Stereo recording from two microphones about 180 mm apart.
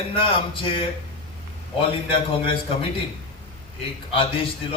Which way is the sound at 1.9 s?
30° left (ahead or behind).